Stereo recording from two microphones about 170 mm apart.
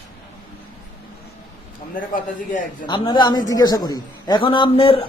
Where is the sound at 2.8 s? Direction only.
25° left (ahead or behind).